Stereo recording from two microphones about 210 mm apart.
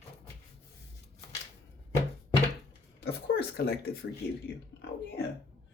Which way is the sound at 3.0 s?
45° left (ahead or behind).